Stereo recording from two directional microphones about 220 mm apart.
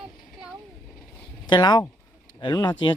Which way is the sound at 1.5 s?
20° left (ahead or behind).